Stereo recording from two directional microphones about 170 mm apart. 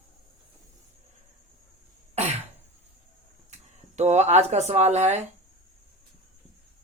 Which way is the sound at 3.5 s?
40° right (ahead or behind).